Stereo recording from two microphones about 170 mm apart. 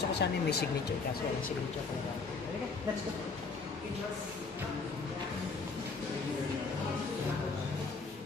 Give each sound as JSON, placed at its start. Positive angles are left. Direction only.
{"t": 0.1, "sound": "speech", "side_deg": 75}